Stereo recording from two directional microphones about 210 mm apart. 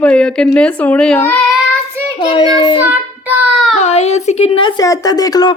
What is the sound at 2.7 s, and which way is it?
Speech, 5° right (ahead or behind).